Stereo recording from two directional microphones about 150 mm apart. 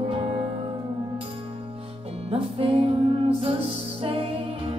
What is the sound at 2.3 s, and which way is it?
Music, 40° right (ahead or behind).